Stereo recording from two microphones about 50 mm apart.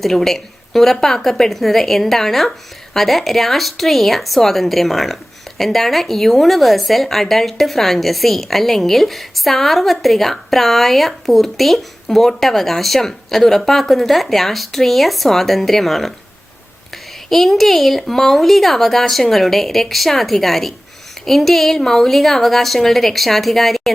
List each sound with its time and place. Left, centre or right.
0.0 s a woman's voice: centre
17.2 s a woman's voice: centre